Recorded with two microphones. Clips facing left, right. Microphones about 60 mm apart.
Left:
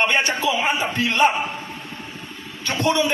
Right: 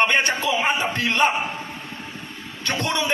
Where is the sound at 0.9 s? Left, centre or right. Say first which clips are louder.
Left 2 dB; right.